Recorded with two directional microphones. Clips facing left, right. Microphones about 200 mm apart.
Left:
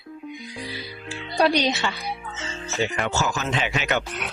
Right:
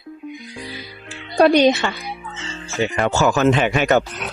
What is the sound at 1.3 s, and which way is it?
Speech, 50° right (ahead or behind).